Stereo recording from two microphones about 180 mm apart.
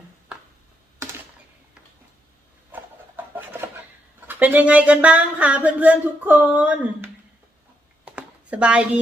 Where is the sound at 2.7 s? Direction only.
10° right (ahead or behind).